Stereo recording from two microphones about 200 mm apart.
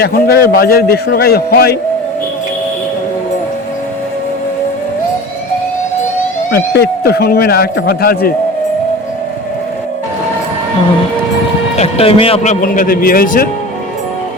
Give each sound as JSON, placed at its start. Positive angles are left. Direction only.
{"t": 0.0, "sound": "a man's voice", "side_deg": 50}
{"t": 6.5, "sound": "a man's voice", "side_deg": 50}
{"t": 11.8, "sound": "a man's voice", "side_deg": 30}